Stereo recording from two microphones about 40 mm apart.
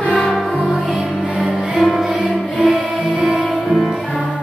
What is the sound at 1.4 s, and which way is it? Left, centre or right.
Music, centre.